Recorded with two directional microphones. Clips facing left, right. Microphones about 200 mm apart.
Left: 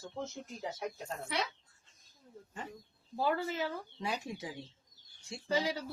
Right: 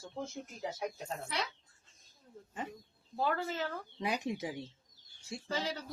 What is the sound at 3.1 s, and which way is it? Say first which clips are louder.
Speech: left 1 dB; 10° left (ahead or behind).